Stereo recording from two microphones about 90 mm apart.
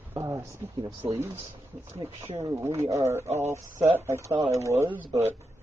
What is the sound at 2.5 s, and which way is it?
Speech, 30° right (ahead or behind).